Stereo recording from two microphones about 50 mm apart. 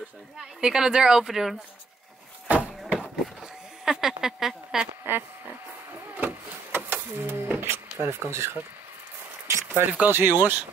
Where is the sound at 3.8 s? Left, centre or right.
Centre.